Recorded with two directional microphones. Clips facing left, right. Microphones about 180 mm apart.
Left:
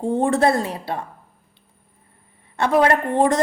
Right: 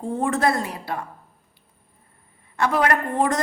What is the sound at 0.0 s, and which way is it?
A woman's voice, 30° left (ahead or behind).